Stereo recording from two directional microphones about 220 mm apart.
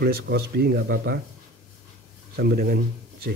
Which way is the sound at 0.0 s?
45° right (ahead or behind).